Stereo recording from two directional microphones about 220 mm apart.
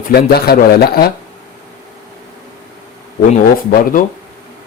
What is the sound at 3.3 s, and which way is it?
Speech, 40° left (ahead or behind).